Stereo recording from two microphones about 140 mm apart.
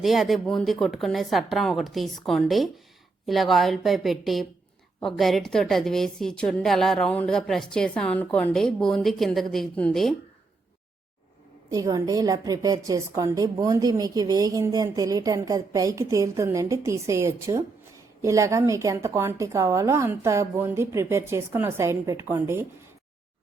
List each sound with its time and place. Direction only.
0.0 s a woman's voice: centre (ahead or behind)
11.7 s a woman's voice: 25° right (ahead or behind)